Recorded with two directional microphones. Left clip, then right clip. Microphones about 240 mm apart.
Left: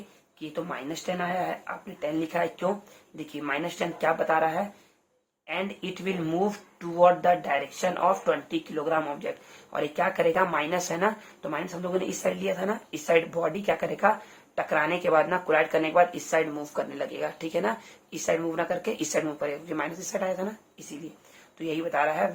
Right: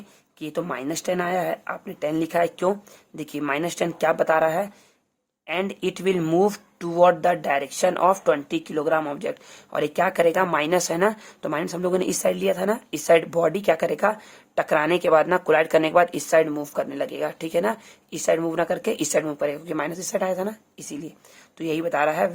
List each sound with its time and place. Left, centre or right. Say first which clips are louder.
0.3 s speech: right 5 dB; right